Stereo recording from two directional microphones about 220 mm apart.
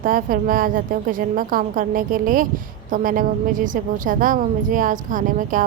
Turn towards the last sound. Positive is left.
turn(degrees=-35)  # may be behind; listen again after turning